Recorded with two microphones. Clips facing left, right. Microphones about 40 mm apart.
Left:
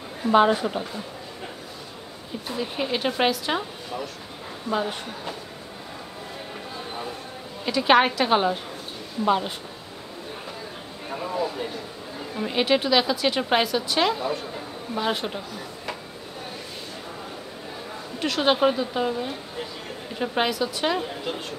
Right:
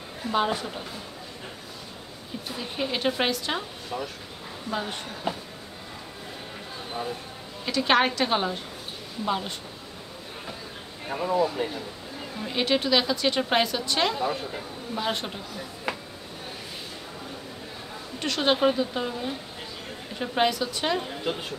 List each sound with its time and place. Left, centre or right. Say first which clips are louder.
0.2 s a woman's voice: left 7 dB; centre
2.4 s a woman's voice: left 3 dB; centre
5.3 s speech: right 7 dB; centre
7.6 s a woman's voice: left 4 dB; centre
11.1 s a woman's voice: right 3 dB; centre
12.4 s a woman's voice: left 3 dB; centre
18.2 s a woman's voice: left 2 dB; centre